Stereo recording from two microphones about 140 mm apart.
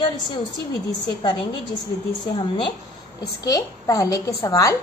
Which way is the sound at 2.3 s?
40° left (ahead or behind).